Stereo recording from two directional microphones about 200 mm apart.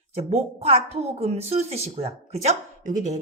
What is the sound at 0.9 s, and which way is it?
Speech, 30° right (ahead or behind).